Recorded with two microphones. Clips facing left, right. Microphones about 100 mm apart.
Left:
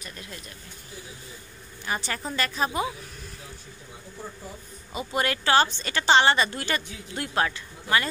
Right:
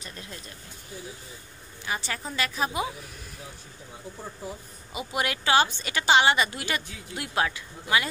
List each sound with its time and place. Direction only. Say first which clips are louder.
0.0 s speech: even; 30° right (ahead or behind)
1.9 s a woman's voice: left 2 dB; centre (ahead or behind)
4.9 s a woman's voice: left 2 dB; 10° right (ahead or behind)